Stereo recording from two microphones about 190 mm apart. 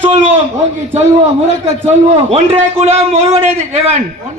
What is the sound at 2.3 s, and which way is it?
Speech, 35° right (ahead or behind).